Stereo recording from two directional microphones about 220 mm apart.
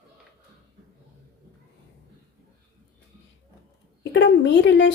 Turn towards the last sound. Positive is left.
turn(degrees=55)  # may be behind; listen again after turning